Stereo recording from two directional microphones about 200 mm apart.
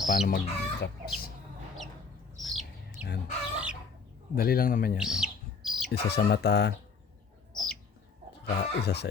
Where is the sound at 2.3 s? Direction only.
Centre (ahead or behind).